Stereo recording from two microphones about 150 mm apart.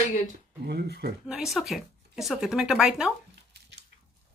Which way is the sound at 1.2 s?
Centre (ahead or behind).